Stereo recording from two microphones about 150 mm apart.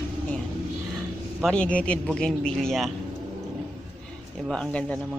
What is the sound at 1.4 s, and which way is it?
Speech, 5° left (ahead or behind).